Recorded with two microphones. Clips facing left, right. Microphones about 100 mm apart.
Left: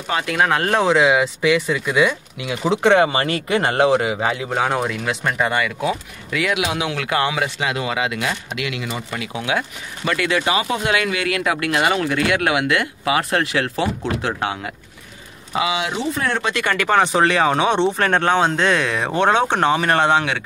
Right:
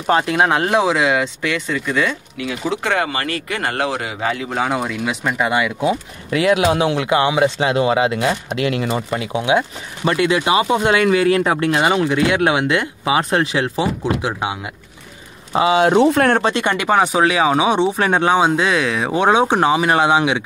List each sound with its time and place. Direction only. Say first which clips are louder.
0.0 s speech: right 4 dB; 35° right (ahead or behind); by 0.8 s 15° right (ahead or behind)
0.8 s speech: left 1 dB; centre (ahead or behind)
4.6 s speech: right 1 dB; centre (ahead or behind)
5.8 s speech: right 4 dB; 25° right (ahead or behind)
9.1 s speech: right 5 dB; 25° right (ahead or behind)
15.5 s speech: right 8 dB; 40° right (ahead or behind)
16.0 s speech: right 9 dB; 60° right (ahead or behind)
16.5 s speech: right 1 dB; 20° right (ahead or behind)